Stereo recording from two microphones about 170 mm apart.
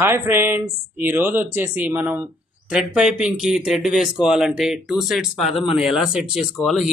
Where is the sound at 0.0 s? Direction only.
15° right (ahead or behind).